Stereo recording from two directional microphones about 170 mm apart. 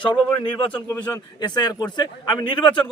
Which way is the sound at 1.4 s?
25° left (ahead or behind).